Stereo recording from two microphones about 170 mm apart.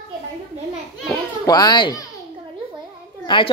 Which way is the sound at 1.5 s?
25° left (ahead or behind).